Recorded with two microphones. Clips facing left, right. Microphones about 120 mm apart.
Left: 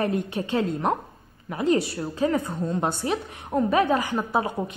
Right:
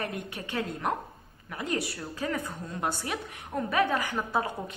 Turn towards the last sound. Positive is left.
turn(degrees=20)  # may be behind; listen again after turning